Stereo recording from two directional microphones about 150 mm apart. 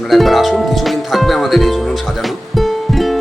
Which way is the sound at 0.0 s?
Centre (ahead or behind).